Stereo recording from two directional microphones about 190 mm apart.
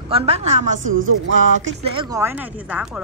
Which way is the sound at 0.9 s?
85° right.